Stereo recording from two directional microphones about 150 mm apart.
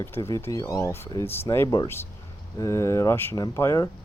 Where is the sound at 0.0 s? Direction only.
15° left (ahead or behind).